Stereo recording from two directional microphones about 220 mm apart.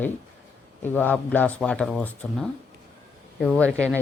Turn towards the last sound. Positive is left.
turn(degrees=5)  # may be behind; listen again after turning